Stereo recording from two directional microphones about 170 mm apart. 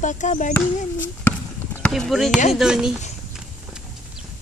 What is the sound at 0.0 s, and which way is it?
Speech, 45° left (ahead or behind).